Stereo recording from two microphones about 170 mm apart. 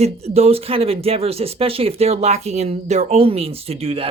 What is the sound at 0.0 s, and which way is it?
Speech, 35° right (ahead or behind).